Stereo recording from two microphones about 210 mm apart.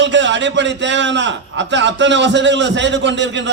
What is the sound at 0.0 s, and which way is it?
A man's voice, 60° right (ahead or behind).